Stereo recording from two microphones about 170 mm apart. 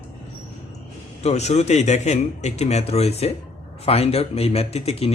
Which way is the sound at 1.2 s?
40° left (ahead or behind).